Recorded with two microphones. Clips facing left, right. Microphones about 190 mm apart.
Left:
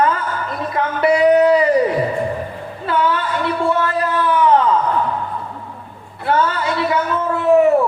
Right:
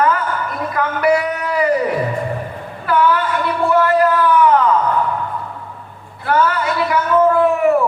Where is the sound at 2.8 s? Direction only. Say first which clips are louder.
Right 3 dB; 25° left (ahead or behind).